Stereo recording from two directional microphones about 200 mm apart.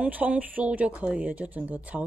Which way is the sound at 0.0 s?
10° right (ahead or behind).